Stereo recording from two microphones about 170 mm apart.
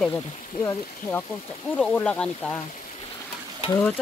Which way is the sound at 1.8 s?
5° left (ahead or behind).